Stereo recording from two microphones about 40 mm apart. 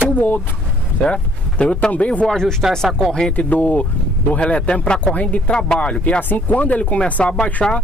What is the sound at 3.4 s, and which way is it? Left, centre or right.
Speech, left.